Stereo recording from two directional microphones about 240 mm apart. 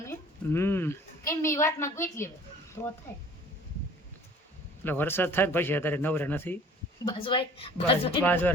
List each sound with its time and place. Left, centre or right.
0.0 s a child's voice: centre
4.8 s a woman's voice: centre
8.2 s speech: centre